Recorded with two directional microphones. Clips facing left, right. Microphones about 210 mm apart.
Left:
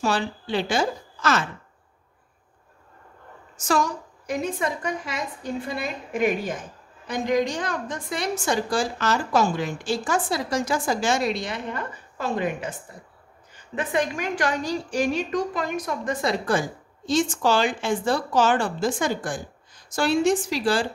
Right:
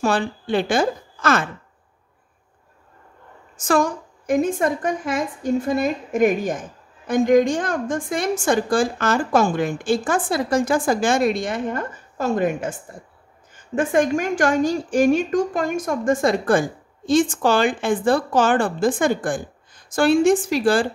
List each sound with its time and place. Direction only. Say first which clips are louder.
0.0 s a woman's voice: right 4 dB; 50° right (ahead or behind)
3.5 s a woman's voice: right 4 dB; 55° right (ahead or behind)